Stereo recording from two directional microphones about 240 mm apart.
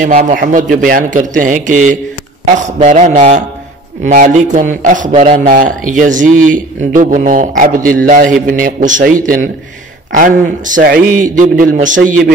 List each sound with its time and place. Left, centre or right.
0.0 s a man's voice: right